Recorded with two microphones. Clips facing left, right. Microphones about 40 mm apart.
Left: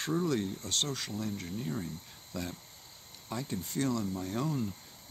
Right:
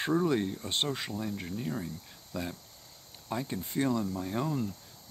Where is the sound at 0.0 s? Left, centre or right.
Right.